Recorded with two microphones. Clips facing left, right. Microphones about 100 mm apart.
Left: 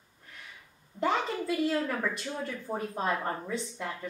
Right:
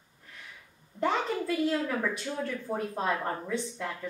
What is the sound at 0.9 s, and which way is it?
A woman's voice, 5° left (ahead or behind).